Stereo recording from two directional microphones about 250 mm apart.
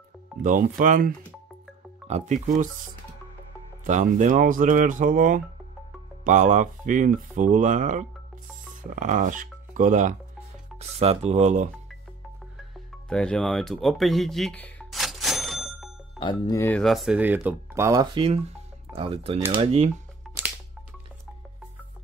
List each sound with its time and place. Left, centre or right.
0.4 s speech: right
3.8 s speech: right
12.7 s speech: centre
14.6 s music: centre
16.2 s speech: centre; by 19.9 s right
20.2 s music: centre